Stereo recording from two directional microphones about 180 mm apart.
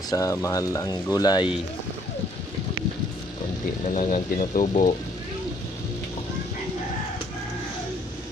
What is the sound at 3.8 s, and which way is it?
Speech, 45° left (ahead or behind).